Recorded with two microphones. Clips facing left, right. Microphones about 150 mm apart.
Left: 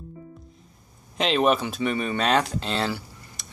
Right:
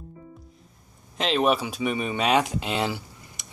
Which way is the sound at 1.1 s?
Centre (ahead or behind).